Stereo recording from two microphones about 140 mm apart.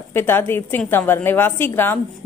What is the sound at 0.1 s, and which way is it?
A woman's voice, 15° left (ahead or behind).